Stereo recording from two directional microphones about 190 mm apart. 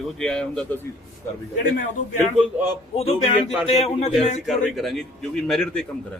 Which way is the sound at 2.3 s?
10° right (ahead or behind).